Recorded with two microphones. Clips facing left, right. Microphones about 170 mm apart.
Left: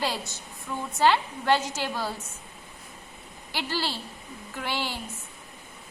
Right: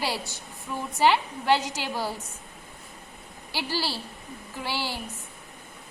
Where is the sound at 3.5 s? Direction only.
10° right (ahead or behind).